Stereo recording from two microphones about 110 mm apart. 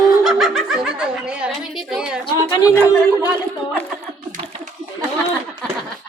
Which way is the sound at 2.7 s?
15° left (ahead or behind).